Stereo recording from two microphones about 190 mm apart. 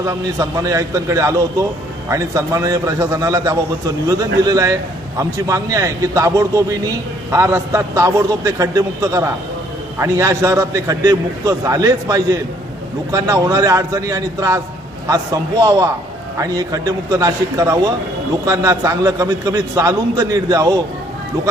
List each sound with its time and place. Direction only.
0.0 s a man's voice: 20° right (ahead or behind)